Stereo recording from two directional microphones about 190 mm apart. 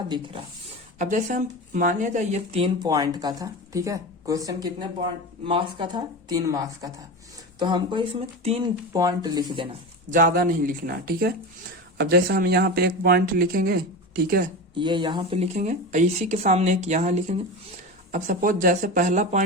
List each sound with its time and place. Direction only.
0.9 s speech: 40° right (ahead or behind)
2.8 s speech: 20° right (ahead or behind)
10.1 s speech: 45° right (ahead or behind)
14.8 s speech: 25° right (ahead or behind); by 19.4 s 40° right (ahead or behind)